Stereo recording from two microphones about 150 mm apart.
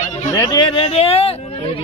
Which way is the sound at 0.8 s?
45° left (ahead or behind).